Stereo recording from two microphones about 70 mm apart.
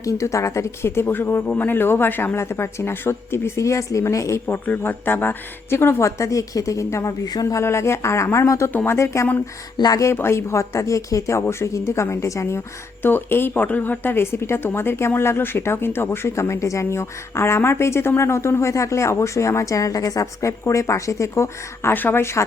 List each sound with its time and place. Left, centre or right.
0.0 s speech: left
4.4 s a woman's voice: left
8.7 s speech: left
9.0 s a woman's voice: left
9.7 s speech: left
10.0 s speech: left
16.3 s a woman's voice: left
21.9 s speech: left